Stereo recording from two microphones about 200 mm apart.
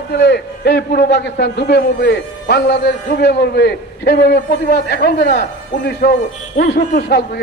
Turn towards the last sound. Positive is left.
turn(degrees=55)  # may be behind; listen again after turning